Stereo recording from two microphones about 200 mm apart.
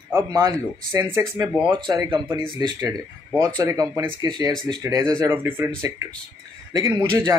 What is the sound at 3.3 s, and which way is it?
A man's voice, 20° right (ahead or behind).